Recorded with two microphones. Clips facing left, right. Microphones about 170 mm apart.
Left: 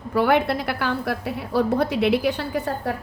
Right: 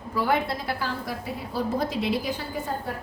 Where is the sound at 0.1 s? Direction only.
65° left (ahead or behind).